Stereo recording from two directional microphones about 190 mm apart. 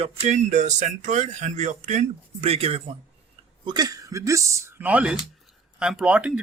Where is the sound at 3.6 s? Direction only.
20° right (ahead or behind); by 6.3 s 5° right (ahead or behind).